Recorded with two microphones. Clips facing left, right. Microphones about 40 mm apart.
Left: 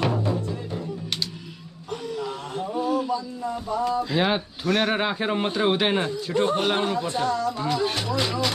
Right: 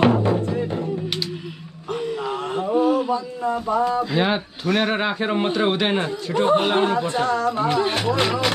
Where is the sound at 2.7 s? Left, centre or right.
Right.